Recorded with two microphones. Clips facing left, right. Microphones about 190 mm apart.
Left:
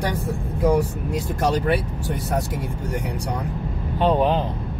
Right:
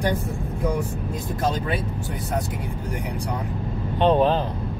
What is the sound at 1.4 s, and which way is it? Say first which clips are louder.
Speech: left 4 dB; 75° left (ahead or behind).